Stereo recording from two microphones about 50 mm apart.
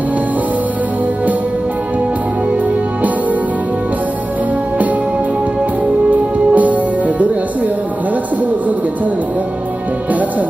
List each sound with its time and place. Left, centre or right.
6.1 s music: right